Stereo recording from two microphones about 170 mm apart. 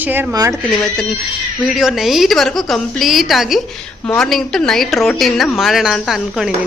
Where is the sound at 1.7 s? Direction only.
Centre (ahead or behind).